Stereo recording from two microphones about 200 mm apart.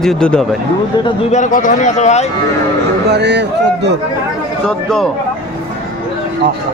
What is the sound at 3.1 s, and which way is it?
Speech, 60° right (ahead or behind).